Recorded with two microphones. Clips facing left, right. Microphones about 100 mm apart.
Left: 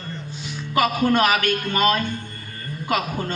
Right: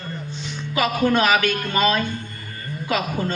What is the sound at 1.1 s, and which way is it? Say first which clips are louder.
Speech: right 1 dB; 50° left (ahead or behind).